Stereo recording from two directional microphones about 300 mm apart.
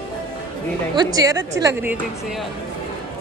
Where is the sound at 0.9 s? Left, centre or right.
Centre.